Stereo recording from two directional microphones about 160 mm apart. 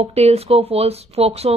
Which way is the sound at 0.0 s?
40° right (ahead or behind).